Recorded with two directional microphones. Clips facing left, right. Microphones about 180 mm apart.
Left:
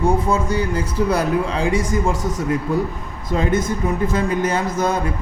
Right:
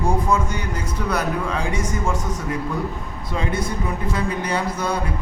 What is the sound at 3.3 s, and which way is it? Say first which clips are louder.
Speech: left 6 dB; 45° left (ahead or behind).